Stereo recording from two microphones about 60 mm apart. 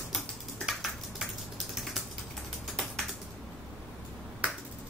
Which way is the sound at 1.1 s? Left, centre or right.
Centre.